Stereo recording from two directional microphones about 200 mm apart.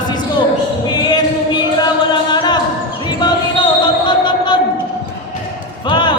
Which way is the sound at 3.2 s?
20° left (ahead or behind).